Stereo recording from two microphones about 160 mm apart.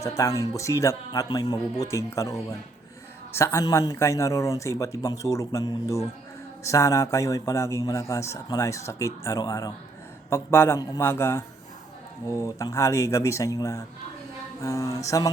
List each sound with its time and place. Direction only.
0.0 s a man's voice: 20° left (ahead or behind)
3.3 s a man's voice: 15° left (ahead or behind)